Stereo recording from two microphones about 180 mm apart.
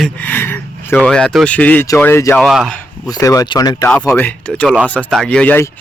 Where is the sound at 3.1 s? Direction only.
20° left (ahead or behind).